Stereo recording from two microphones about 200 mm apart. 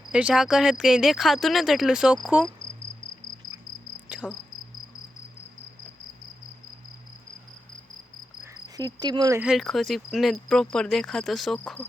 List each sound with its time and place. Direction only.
0.1 s speech: 5° right (ahead or behind)
4.1 s cricket: 5° right (ahead or behind)
8.8 s cricket: 20° right (ahead or behind)
9.4 s speech: centre (ahead or behind)